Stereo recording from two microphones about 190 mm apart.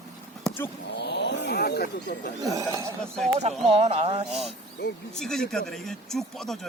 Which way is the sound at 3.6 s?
35° right (ahead or behind).